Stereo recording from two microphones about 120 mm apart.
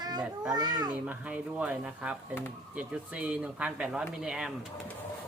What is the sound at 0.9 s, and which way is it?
Speech, 10° right (ahead or behind).